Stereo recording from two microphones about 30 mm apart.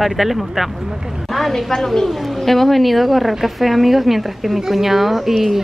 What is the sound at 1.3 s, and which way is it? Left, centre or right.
Speech, centre.